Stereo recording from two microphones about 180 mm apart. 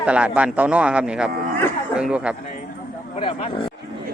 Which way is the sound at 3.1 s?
30° left (ahead or behind).